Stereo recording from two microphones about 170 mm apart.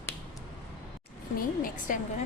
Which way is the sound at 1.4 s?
55° left (ahead or behind).